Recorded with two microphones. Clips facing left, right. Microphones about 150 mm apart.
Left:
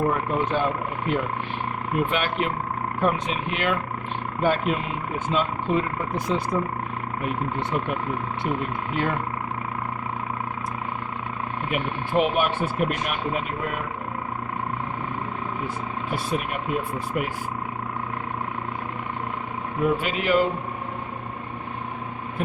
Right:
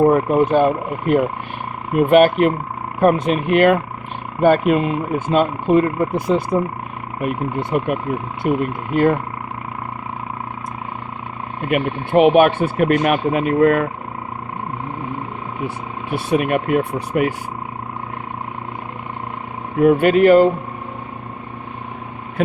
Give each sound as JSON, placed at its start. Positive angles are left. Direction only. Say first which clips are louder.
{"t": 0.0, "sound": "speech", "louder": "right 10 dB", "side_deg": -50}
{"t": 11.7, "sound": "speech", "louder": "right 9 dB", "side_deg": -65}
{"t": 16.1, "sound": "speech", "louder": "right 11 dB", "side_deg": -70}
{"t": 19.8, "sound": "speech", "louder": "right 12 dB", "side_deg": -55}